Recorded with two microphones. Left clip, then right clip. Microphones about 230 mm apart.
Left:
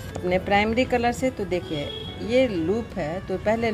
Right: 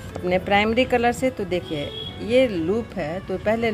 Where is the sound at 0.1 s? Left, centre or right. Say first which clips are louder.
Right 2 dB; centre.